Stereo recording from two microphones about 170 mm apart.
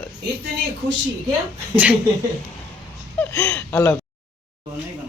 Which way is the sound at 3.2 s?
15° left (ahead or behind).